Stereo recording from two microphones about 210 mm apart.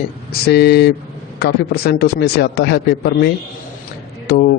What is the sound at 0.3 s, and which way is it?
A man's voice, 50° left (ahead or behind).